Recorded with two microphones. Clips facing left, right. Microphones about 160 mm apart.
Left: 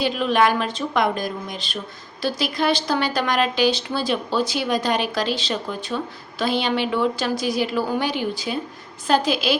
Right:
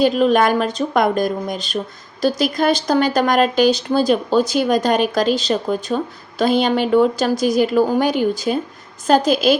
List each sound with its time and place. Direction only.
0.0 s speech: 45° right (ahead or behind)